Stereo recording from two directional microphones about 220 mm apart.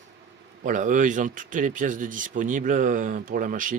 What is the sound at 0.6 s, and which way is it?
A man's voice, 35° right (ahead or behind).